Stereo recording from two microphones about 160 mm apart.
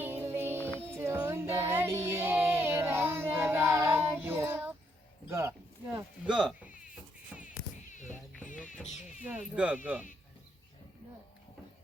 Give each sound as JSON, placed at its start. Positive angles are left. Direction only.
{"t": 0.0, "sound": "music", "side_deg": -15}
{"t": 0.9, "sound": "child singing", "side_deg": -15}
{"t": 5.3, "sound": "a sound", "side_deg": -15}
{"t": 6.3, "sound": "insect", "side_deg": -5}
{"t": 8.8, "sound": "a sound", "side_deg": 45}
{"t": 9.2, "sound": "speech", "side_deg": -5}